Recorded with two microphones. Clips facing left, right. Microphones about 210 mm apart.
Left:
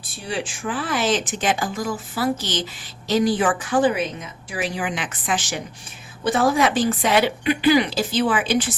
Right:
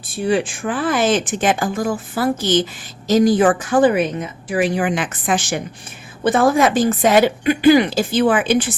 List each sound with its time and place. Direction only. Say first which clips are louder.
0.3 s a woman's voice: right 8 dB; 55° right (ahead or behind)